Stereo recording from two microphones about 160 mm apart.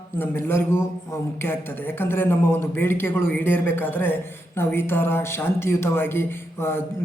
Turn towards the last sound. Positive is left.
turn(degrees=15)  # may be behind; listen again after turning